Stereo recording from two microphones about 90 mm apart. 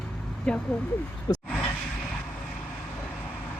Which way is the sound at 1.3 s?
70° left (ahead or behind).